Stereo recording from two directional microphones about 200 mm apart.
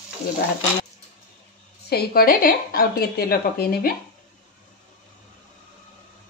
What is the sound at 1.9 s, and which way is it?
Speech, 50° left (ahead or behind).